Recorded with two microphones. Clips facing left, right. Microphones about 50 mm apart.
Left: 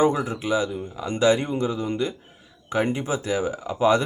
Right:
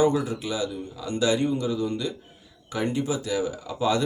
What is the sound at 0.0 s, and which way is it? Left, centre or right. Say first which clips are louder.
Speech: left 1 dB; left.